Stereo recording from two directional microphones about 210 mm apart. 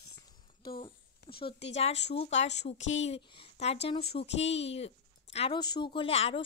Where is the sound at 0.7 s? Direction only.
25° left (ahead or behind).